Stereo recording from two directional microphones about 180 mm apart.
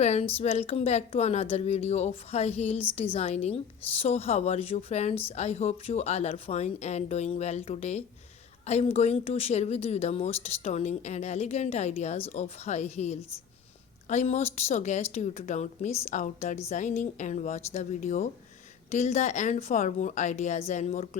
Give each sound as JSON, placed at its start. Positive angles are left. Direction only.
{"t": 0.0, "sound": "a woman's voice", "side_deg": 35}